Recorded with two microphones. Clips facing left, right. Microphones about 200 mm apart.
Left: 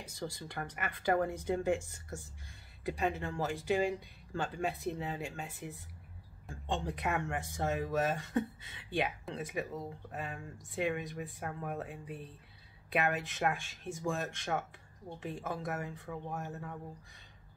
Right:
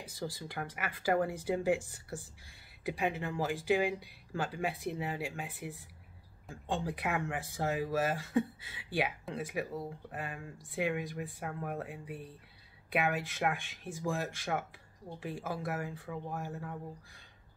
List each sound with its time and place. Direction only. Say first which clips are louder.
0.1 s speech: right 1 dB; 5° right (ahead or behind)
2.9 s speech: even; 10° right (ahead or behind)
13.6 s speech: left 1 dB; 55° right (ahead or behind)
14.0 s speech: right 1 dB; 5° right (ahead or behind)